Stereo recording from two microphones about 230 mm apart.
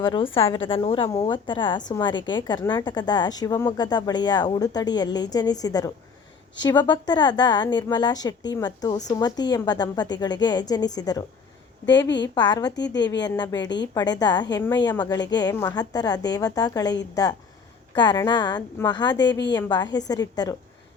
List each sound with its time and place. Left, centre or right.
0.0 s a woman's voice: left
12.0 s a woman's voice: left
12.3 s a woman's voice: centre
12.7 s a woman's voice: left
13.0 s a woman's voice: centre